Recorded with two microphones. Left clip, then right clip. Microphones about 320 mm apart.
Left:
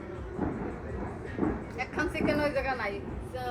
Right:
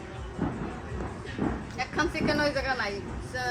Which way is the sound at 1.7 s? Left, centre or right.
Right.